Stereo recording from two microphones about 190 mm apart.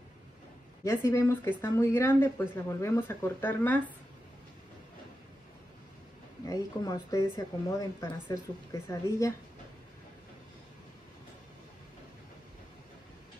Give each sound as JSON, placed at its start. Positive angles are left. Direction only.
{"t": 0.8, "sound": "speech", "side_deg": 15}
{"t": 6.4, "sound": "speech", "side_deg": 20}